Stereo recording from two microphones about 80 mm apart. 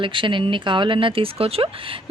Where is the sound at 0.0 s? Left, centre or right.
Right.